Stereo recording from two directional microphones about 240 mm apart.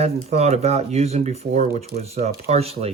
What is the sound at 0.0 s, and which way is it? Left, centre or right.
Speech, right.